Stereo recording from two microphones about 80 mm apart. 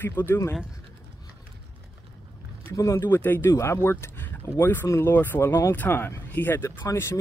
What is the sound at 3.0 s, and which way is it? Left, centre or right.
Speech, left.